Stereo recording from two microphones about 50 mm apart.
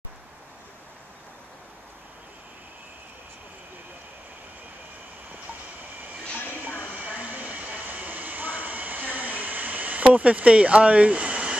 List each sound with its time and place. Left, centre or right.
6.8 s train: right